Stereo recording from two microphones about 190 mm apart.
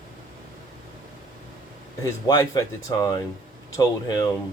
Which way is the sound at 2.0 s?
20° left (ahead or behind).